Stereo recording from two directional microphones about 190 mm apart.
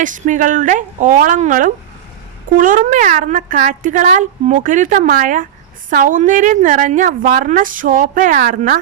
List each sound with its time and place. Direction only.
0.0 s a woman's voice: 40° right (ahead or behind)